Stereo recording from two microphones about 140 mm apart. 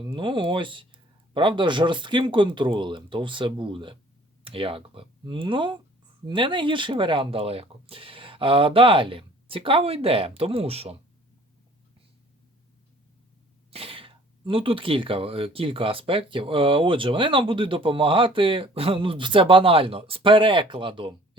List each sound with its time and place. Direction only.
0.0 s speech: 35° right (ahead or behind)
13.7 s speech: 45° right (ahead or behind)